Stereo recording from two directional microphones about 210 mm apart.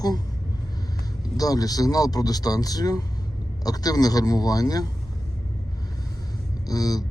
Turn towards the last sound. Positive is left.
turn(degrees=15)  # may be behind; listen again after turning